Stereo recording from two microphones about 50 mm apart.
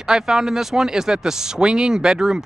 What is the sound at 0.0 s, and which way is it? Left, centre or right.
Speech, centre.